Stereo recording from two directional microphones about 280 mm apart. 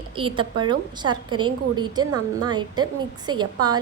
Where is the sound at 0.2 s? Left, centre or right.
Centre.